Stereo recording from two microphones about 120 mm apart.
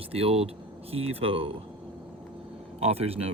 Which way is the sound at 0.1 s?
55° right (ahead or behind).